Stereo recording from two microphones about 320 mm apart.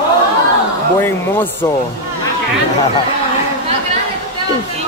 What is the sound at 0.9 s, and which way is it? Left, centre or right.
Speech, centre.